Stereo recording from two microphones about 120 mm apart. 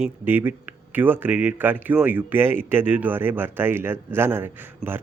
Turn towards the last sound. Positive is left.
turn(degrees=-15)  # may be behind; listen again after turning